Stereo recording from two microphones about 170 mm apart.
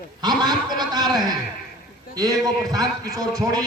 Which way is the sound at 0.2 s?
25° right (ahead or behind).